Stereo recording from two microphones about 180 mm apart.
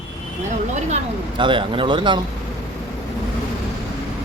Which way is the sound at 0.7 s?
40° right (ahead or behind).